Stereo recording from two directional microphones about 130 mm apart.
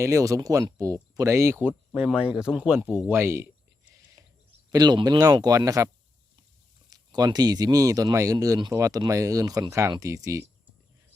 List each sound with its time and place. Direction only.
0.0 s speech: 25° right (ahead or behind)
1.6 s speech: 5° right (ahead or behind)
3.1 s speech: 20° right (ahead or behind)
4.2 s a sound: 30° right (ahead or behind)
4.7 s speech: 35° right (ahead or behind)
6.9 s speech: 30° right (ahead or behind)